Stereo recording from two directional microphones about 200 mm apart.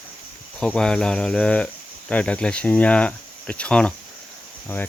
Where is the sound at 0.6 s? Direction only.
5° left (ahead or behind).